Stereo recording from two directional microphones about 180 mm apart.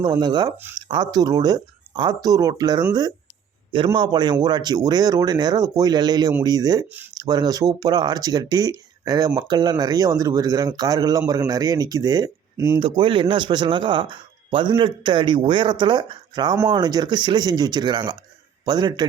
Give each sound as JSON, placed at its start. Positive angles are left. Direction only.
{"t": 0.0, "sound": "speech", "side_deg": -25}
{"t": 0.5, "sound": "speech", "side_deg": -10}
{"t": 0.8, "sound": "speech", "side_deg": -25}
{"t": 6.8, "sound": "speech", "side_deg": -10}
{"t": 7.1, "sound": "speech", "side_deg": -20}
{"t": 12.8, "sound": "speech", "side_deg": -25}